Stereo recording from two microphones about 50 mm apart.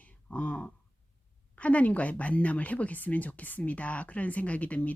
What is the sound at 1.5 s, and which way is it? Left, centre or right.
Speech, left.